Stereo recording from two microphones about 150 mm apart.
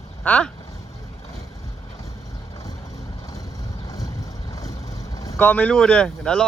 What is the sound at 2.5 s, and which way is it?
Vehicle, 25° left (ahead or behind).